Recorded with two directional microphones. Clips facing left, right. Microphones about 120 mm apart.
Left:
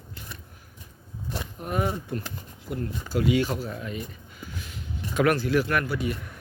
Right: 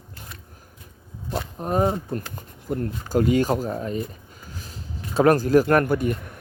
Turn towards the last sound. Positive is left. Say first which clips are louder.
# right 7 dB
turn(degrees=-50)  # may be behind; listen again after turning